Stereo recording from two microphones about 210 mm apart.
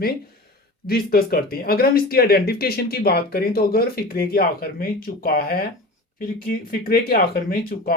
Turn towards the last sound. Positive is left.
turn(degrees=45)  # may be behind; listen again after turning